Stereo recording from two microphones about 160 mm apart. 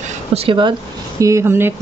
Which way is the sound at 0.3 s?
35° right (ahead or behind).